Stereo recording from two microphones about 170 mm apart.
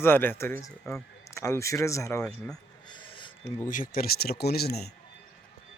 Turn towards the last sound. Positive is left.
turn(degrees=70)  # may be behind; listen again after turning